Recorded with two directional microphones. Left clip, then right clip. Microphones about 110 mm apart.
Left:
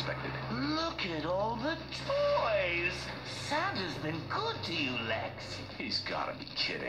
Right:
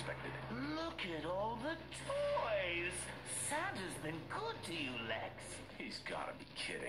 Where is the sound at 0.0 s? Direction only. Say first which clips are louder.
Left 8 dB; 35° right (ahead or behind).